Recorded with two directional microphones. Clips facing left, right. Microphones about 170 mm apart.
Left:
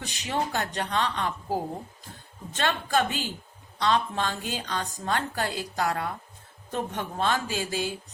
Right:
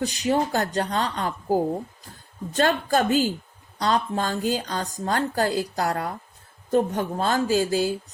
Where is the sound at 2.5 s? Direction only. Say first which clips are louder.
Right 5 dB; 40° right (ahead or behind).